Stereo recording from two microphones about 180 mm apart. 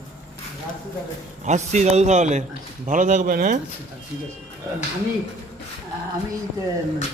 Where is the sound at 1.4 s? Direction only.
40° right (ahead or behind).